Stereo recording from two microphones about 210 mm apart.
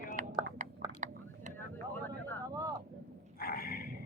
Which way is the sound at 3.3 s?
45° left (ahead or behind).